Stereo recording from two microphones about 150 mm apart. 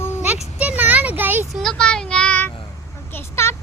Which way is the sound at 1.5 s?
5° left (ahead or behind).